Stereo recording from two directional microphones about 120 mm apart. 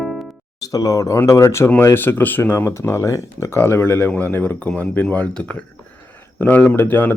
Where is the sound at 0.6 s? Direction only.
30° left (ahead or behind).